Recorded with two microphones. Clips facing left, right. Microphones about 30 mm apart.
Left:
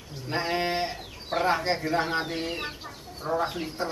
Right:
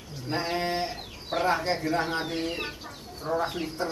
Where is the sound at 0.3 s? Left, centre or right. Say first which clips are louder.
Left 1 dB; centre.